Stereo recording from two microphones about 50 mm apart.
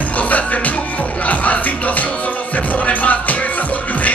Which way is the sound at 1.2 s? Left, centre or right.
Left.